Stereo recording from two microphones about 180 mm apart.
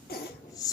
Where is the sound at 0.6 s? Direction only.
20° left (ahead or behind).